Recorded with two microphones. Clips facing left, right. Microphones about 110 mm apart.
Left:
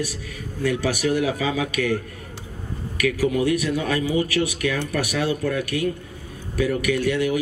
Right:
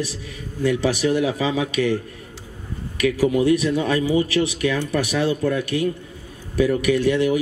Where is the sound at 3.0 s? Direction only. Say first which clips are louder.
Right 3 dB; 25° right (ahead or behind).